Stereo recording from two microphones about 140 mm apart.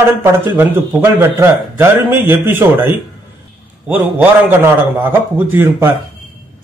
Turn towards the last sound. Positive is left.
turn(degrees=-15)  # may be behind; listen again after turning